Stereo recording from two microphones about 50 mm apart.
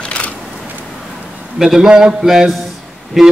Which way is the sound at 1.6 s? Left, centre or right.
Centre.